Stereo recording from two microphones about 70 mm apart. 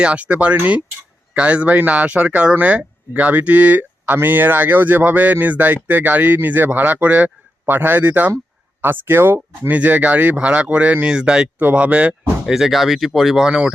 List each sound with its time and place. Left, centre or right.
0.0 s speech: centre; by 9.7 s right
9.7 s speech: right
12.5 s speech: centre